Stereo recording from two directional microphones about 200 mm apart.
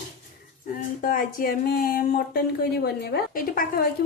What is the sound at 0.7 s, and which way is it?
A woman's voice, 40° left (ahead or behind).